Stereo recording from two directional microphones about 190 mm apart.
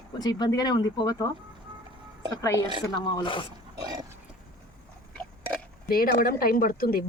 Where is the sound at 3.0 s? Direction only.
25° left (ahead or behind).